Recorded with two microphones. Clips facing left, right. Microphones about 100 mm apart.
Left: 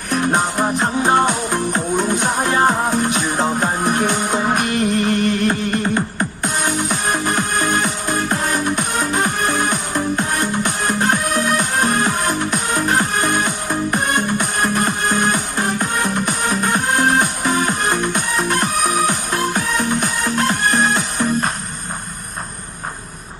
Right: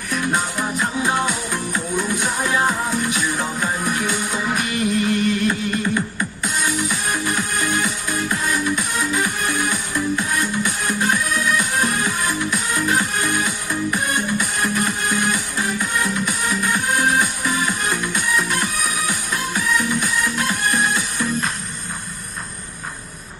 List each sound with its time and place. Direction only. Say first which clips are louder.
0.1 s music: left 5 dB; 45° left (ahead or behind)